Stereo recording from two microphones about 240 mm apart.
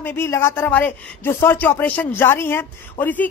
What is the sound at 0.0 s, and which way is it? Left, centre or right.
Speech, centre.